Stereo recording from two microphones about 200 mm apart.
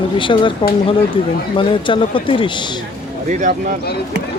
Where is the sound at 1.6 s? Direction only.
25° left (ahead or behind).